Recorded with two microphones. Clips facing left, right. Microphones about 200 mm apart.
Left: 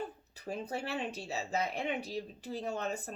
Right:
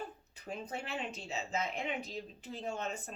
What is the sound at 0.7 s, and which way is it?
Speech, 35° left (ahead or behind).